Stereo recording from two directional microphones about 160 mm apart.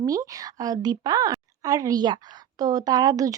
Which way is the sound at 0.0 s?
20° right (ahead or behind).